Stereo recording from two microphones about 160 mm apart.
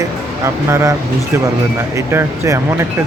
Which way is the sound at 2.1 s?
15° right (ahead or behind).